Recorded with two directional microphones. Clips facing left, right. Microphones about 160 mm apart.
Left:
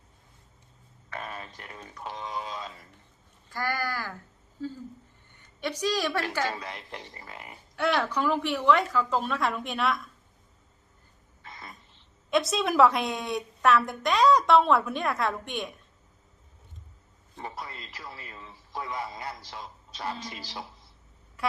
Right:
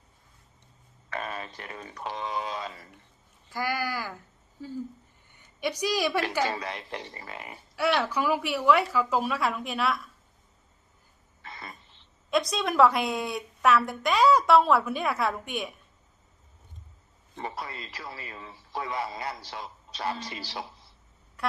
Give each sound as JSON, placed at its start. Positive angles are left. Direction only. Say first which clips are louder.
{"t": 1.1, "sound": "speech", "louder": "right 3 dB", "side_deg": -90}
{"t": 3.5, "sound": "a woman's voice", "louder": "right 1 dB", "side_deg": -10}
{"t": 6.5, "sound": "a man's voice", "louder": "right 3 dB", "side_deg": -80}
{"t": 7.8, "sound": "a woman's voice", "louder": "even", "side_deg": -5}
{"t": 11.4, "sound": "a sound", "louder": "right 2 dB", "side_deg": -75}
{"t": 12.3, "sound": "a woman's voice", "louder": "left 1 dB", "side_deg": 0}
{"t": 17.3, "sound": "a man's voice", "louder": "right 3 dB", "side_deg": -80}
{"t": 21.4, "sound": "a sound", "louder": "left 1 dB", "side_deg": 0}